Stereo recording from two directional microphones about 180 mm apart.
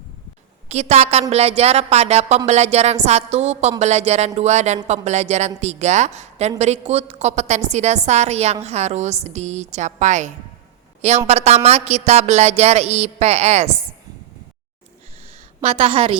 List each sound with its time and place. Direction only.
0.7 s a woman's voice: 40° right (ahead or behind)
15.6 s a woman's voice: 35° right (ahead or behind)